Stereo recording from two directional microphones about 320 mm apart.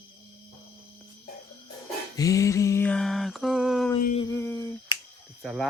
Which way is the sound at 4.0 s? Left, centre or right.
Left.